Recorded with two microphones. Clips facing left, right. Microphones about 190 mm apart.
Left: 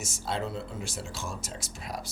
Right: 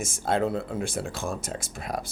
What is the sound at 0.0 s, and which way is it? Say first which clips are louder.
Speech: right 8 dB; 50° right (ahead or behind).